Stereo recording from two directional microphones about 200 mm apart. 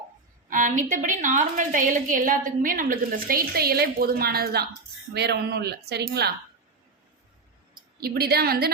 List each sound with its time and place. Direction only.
0.5 s a woman's voice: 40° right (ahead or behind); by 6.3 s 55° right (ahead or behind)
8.0 s a woman's voice: 50° right (ahead or behind)